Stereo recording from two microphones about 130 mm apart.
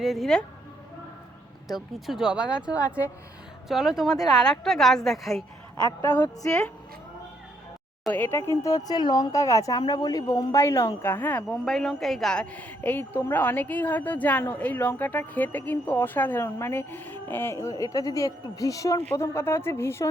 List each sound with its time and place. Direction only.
0.0 s a woman's voice: centre (ahead or behind)
1.6 s a woman's voice: centre (ahead or behind)
4.1 s speech: 30° left (ahead or behind)
4.4 s a woman's voice: 5° left (ahead or behind)
6.4 s speech: 20° left (ahead or behind)
8.1 s speech: 15° left (ahead or behind)
11.4 s a woman's voice: centre (ahead or behind); by 20.1 s 20° left (ahead or behind)